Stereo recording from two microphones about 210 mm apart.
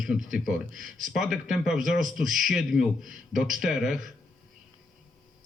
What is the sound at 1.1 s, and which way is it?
Speech, 5° right (ahead or behind).